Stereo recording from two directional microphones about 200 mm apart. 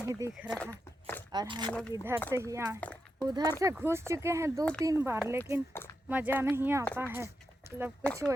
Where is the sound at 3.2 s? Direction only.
20° right (ahead or behind).